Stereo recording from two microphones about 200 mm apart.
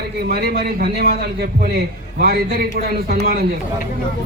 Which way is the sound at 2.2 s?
50° right (ahead or behind).